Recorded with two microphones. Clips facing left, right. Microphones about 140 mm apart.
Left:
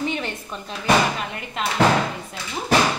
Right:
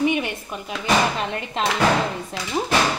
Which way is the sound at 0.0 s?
15° right (ahead or behind).